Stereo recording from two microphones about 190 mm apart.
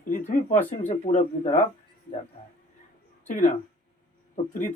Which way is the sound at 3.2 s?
40° left (ahead or behind).